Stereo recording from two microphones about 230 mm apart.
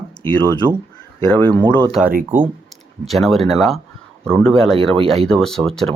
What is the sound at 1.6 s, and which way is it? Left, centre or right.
Speech, centre.